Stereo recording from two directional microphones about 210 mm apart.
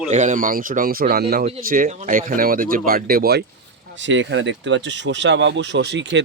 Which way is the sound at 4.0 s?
60° right (ahead or behind).